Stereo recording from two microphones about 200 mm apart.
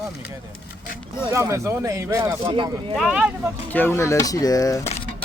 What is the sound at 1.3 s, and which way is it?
Speech, 15° right (ahead or behind).